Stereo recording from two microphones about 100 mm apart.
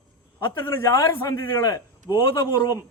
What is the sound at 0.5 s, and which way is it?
A man's voice, 20° left (ahead or behind).